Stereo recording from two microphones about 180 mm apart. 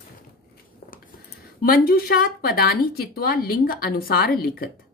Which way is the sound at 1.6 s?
55° left (ahead or behind).